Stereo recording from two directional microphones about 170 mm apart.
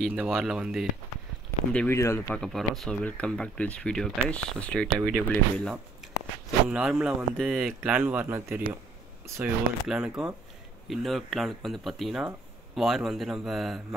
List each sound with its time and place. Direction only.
0.0 s speech: 5° right (ahead or behind)
1.7 s speech: 5° left (ahead or behind)
2.2 s speech: 5° left (ahead or behind)